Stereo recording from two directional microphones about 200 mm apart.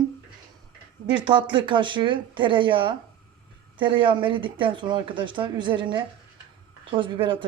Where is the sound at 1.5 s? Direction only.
25° right (ahead or behind).